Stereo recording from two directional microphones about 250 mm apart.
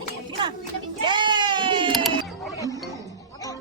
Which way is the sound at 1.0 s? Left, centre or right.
Centre.